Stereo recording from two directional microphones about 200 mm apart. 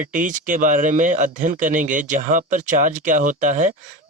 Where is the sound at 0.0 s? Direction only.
40° right (ahead or behind).